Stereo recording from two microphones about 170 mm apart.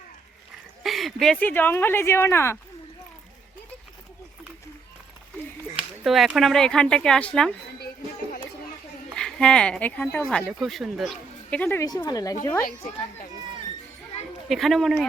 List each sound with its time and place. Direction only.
0.8 s speech: centre (ahead or behind); by 2.6 s 15° left (ahead or behind)
5.7 s speech: 5° right (ahead or behind)
9.1 s speech: 5° left (ahead or behind)
11.6 s speech: 15° left (ahead or behind)
14.5 s speech: centre (ahead or behind)